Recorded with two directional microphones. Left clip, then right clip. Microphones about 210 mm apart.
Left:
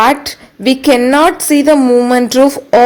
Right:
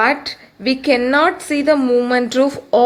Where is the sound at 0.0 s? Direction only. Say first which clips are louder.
Left 6 dB; 45° left (ahead or behind).